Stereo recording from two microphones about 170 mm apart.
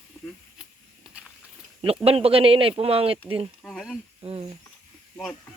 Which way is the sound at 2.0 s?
35° right (ahead or behind).